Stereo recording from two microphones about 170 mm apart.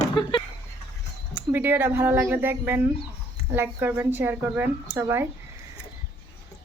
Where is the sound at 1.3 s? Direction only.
10° right (ahead or behind).